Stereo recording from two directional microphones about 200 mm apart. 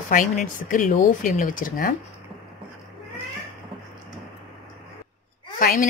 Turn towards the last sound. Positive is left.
turn(degrees=45)  # may be behind; listen again after turning